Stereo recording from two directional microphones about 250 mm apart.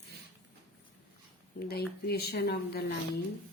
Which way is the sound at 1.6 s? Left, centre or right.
Left.